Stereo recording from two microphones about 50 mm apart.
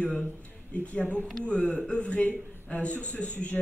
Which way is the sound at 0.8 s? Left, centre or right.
Left.